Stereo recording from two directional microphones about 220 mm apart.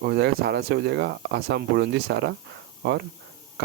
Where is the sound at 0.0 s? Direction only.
50° right (ahead or behind).